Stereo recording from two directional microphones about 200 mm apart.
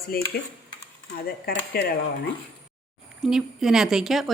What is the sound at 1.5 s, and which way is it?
Speech, 50° left (ahead or behind).